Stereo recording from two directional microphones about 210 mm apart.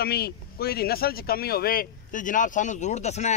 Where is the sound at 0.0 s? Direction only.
50° left (ahead or behind).